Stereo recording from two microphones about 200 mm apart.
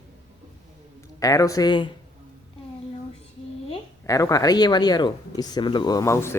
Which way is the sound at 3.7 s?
15° left (ahead or behind).